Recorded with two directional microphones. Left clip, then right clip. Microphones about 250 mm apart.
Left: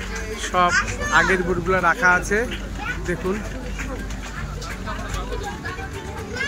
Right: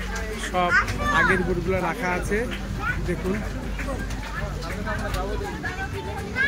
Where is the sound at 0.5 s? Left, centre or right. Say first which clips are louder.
Left 2 dB; centre.